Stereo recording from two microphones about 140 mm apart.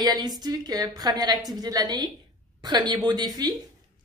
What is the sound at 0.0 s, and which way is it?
A woman's voice, 30° right (ahead or behind).